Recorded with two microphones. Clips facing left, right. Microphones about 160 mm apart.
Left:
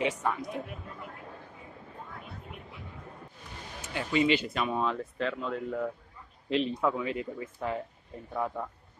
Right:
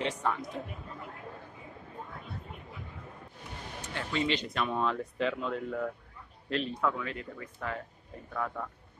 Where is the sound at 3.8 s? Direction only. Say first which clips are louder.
Left 5 dB; 10° left (ahead or behind).